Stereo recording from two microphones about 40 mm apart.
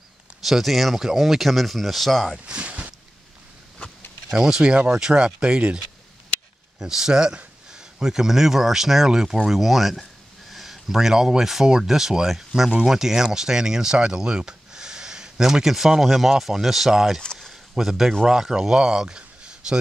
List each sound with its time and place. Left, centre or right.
0.4 s speech: centre
2.4 s speech: right
4.3 s speech: centre
6.8 s speech: centre
17.5 s a sound: centre
18.2 s speech: centre